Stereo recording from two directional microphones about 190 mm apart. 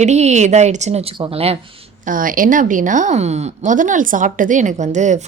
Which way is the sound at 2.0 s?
45° right (ahead or behind).